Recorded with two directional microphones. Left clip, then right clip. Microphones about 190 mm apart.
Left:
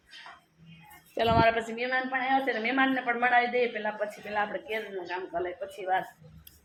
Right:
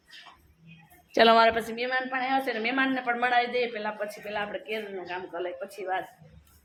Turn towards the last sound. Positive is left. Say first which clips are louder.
# left 2 dB
turn(degrees=-10)  # may be behind; listen again after turning